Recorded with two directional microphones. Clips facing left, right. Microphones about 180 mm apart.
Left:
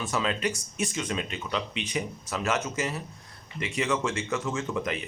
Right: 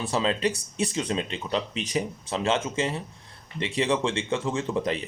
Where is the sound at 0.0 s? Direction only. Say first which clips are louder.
Right 3 dB; 30° right (ahead or behind).